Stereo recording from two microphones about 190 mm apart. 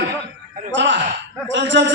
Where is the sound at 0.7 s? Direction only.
75° right (ahead or behind).